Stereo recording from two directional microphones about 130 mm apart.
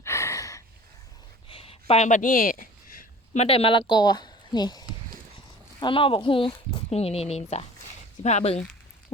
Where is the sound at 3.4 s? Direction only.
45° left (ahead or behind); by 4.9 s 30° left (ahead or behind).